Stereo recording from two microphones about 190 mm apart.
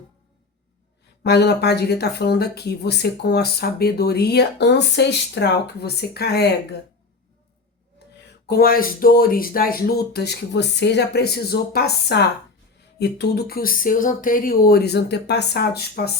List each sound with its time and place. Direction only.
1.2 s speech: 60° left (ahead or behind)
8.2 s speech: 55° left (ahead or behind)